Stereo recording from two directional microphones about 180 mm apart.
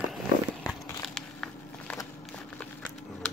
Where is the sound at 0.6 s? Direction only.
5° left (ahead or behind).